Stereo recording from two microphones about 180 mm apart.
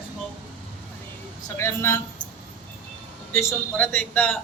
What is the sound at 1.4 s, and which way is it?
Speech, 15° left (ahead or behind).